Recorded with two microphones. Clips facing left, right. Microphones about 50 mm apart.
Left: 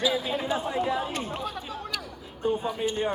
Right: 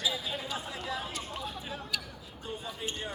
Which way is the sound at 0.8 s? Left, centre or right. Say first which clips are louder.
Left 10 dB; left.